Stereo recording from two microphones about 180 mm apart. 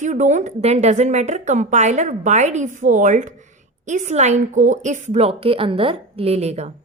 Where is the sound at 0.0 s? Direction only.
45° right (ahead or behind).